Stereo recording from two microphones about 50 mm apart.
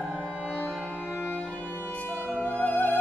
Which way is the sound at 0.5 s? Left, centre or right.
Left.